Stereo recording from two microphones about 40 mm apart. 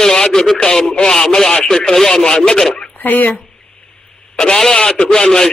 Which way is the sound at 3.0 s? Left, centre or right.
Left.